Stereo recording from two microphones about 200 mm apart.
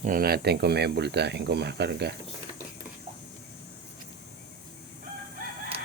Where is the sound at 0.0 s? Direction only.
45° right (ahead or behind).